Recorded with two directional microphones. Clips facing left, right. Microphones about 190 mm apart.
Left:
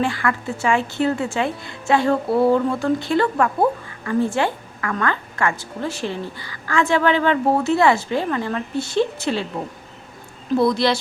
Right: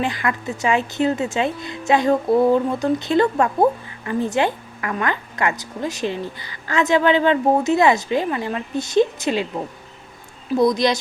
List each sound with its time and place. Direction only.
0.0 s speech: 20° right (ahead or behind)
10.5 s speech: 15° right (ahead or behind)